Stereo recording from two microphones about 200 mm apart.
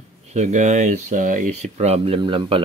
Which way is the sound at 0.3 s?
35° right (ahead or behind).